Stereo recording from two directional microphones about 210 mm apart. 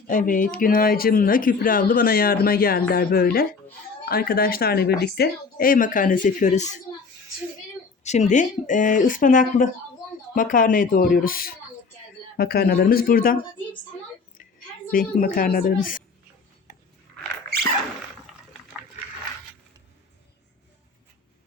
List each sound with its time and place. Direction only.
0.1 s speech: 40° left (ahead or behind)
8.0 s speech: 35° left (ahead or behind)
14.9 s speech: 40° left (ahead or behind)